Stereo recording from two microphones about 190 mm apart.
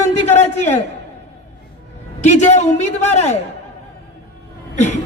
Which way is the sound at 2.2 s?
35° left (ahead or behind).